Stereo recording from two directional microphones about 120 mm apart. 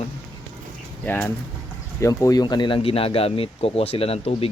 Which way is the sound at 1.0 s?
20° left (ahead or behind).